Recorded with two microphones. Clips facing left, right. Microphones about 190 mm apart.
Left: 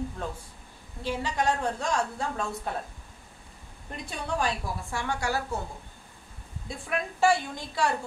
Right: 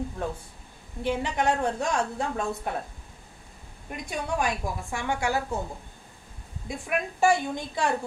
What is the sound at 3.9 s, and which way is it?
A woman's voice, 15° right (ahead or behind).